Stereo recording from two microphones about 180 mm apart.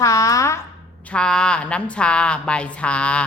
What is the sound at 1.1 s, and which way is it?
A woman's voice, 5° left (ahead or behind).